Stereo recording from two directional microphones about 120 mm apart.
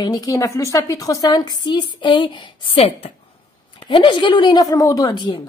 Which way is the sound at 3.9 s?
40° left (ahead or behind).